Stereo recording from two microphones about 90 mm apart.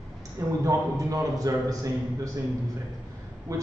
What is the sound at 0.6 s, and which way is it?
A man's voice, 40° right (ahead or behind).